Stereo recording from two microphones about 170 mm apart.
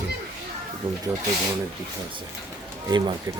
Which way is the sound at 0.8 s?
10° right (ahead or behind).